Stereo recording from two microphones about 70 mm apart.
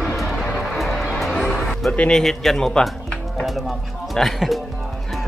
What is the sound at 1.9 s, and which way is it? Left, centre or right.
Speech, centre.